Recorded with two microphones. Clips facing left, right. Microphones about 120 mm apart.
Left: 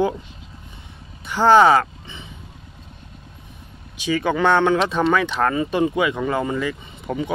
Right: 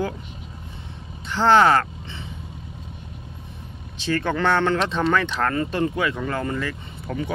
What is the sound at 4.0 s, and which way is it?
Speech, 10° left (ahead or behind).